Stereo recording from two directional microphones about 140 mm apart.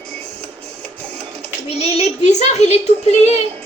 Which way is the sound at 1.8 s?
55° left (ahead or behind).